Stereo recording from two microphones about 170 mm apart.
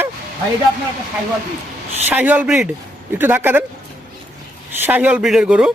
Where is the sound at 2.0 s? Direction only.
10° right (ahead or behind).